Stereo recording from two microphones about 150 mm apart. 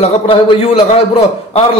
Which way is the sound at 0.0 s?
35° left (ahead or behind).